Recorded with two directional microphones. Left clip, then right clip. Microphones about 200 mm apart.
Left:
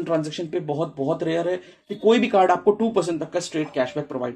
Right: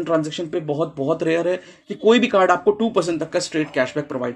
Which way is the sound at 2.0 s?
10° right (ahead or behind).